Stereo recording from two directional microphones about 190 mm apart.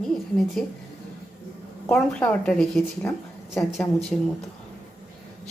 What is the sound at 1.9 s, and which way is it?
A woman's voice, 5° left (ahead or behind).